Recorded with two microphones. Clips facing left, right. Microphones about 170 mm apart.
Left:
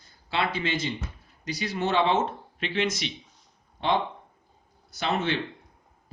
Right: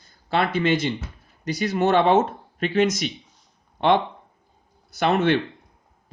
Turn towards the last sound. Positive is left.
turn(degrees=-60)  # may be behind; listen again after turning